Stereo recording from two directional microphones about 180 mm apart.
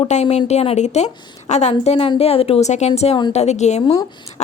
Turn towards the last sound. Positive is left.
turn(degrees=35)  # may be behind; listen again after turning